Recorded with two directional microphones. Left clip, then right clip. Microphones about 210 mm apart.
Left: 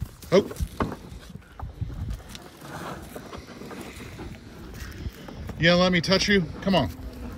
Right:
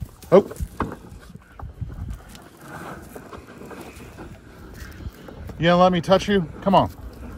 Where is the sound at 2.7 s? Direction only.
Centre (ahead or behind).